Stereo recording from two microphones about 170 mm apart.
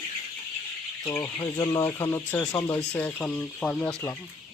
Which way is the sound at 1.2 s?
20° left (ahead or behind).